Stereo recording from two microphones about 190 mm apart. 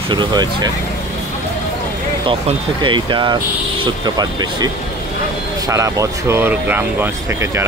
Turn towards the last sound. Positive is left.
turn(degrees=-10)  # may be behind; listen again after turning